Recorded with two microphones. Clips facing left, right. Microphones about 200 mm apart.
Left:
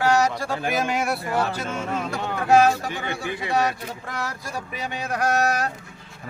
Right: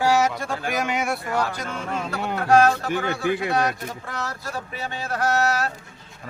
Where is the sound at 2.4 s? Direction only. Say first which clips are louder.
Even; 10° left (ahead or behind).